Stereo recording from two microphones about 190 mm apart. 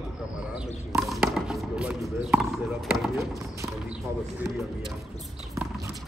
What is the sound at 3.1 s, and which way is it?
Speech, 15° right (ahead or behind).